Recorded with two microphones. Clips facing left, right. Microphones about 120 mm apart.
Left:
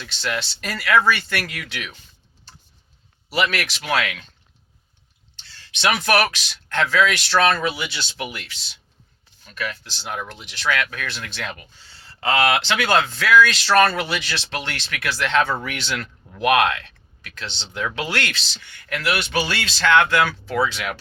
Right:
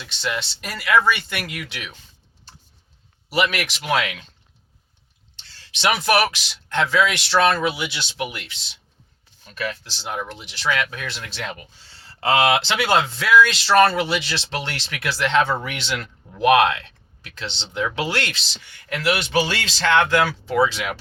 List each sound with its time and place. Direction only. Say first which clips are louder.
0.0 s speech: even; 20° right (ahead or behind)
3.2 s speech: right 1 dB; 15° right (ahead or behind)
5.5 s speech: even; 30° right (ahead or behind)
9.5 s speech: right 1 dB; 30° right (ahead or behind)